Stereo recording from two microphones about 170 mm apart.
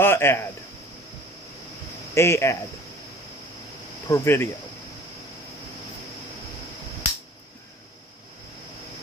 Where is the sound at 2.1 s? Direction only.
15° left (ahead or behind).